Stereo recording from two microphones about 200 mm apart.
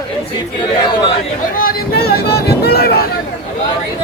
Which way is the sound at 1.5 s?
50° left (ahead or behind).